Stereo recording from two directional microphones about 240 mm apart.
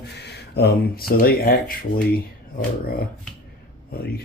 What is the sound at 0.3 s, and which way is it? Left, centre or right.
Speech, left.